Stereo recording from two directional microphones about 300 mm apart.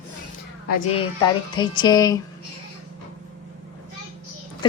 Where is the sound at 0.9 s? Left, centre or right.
Centre.